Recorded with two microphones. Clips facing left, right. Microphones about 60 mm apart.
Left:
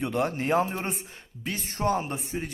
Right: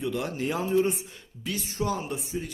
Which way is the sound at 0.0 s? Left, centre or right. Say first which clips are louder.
Left 2 dB; left.